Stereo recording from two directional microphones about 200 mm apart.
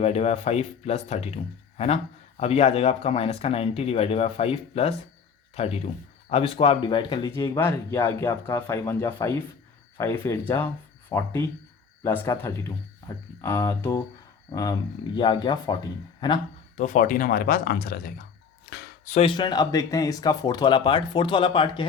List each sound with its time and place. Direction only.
0.0 s speech: 30° left (ahead or behind)
2.4 s speech: 30° left (ahead or behind)
16.7 s speech: 40° left (ahead or behind)
19.0 s speech: 30° left (ahead or behind)